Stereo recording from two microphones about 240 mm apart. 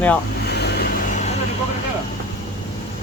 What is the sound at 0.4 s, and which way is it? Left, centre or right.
Vehicle, left.